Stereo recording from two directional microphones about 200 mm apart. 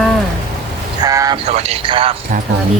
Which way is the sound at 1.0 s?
20° right (ahead or behind).